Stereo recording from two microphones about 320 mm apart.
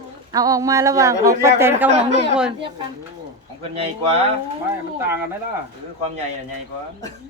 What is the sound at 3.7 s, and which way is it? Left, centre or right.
Speech, centre.